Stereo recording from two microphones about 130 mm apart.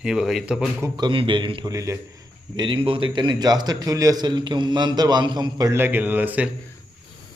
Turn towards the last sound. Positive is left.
turn(degrees=-15)  # may be behind; listen again after turning